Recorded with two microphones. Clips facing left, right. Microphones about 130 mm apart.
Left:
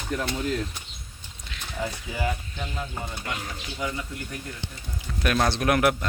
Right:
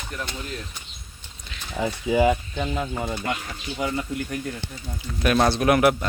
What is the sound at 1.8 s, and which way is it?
Speech, 90° right.